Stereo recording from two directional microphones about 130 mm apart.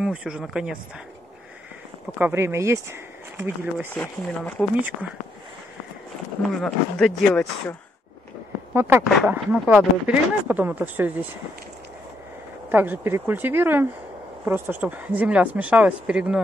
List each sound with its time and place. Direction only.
0.0 s speech: 5° right (ahead or behind)
2.1 s speech: 15° right (ahead or behind)
3.9 s speech: 10° left (ahead or behind)
4.7 s speech: 10° right (ahead or behind)
6.5 s speech: 5° left (ahead or behind)
8.7 s speech: 15° right (ahead or behind)
12.7 s speech: 15° right (ahead or behind)